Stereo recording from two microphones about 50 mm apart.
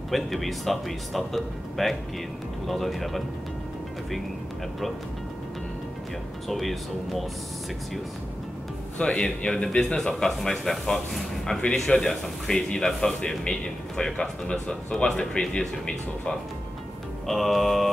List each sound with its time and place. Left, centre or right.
0.1 s speech: centre
6.5 s speech: centre
8.9 s speech: left
17.3 s speech: centre